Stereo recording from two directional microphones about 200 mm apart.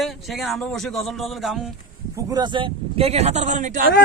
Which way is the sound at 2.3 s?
20° right (ahead or behind).